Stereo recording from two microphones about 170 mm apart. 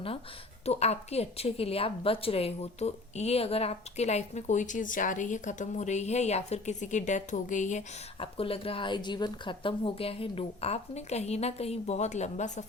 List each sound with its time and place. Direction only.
0.6 s a woman's voice: 40° left (ahead or behind)
8.2 s a woman's voice: 35° left (ahead or behind)